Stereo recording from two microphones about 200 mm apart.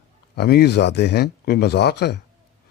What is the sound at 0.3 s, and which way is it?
A man's voice, 55° left (ahead or behind).